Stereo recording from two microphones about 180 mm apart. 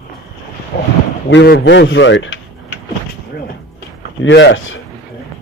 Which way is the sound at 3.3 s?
70° left (ahead or behind).